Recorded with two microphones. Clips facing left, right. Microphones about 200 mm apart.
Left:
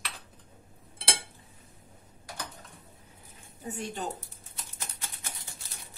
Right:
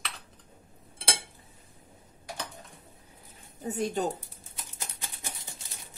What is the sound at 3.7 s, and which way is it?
Speech, 40° right (ahead or behind).